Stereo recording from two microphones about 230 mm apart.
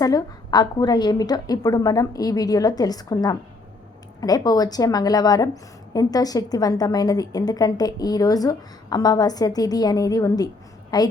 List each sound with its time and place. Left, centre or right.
0.0 s a woman's voice: centre